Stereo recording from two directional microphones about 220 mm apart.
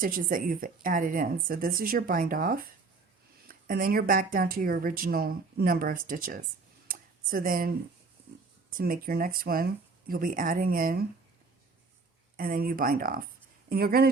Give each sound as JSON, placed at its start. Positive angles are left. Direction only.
{"t": 0.0, "sound": "speech", "side_deg": -40}
{"t": 6.8, "sound": "a sound", "side_deg": -40}
{"t": 8.7, "sound": "speech", "side_deg": -40}
{"t": 12.4, "sound": "speech", "side_deg": -40}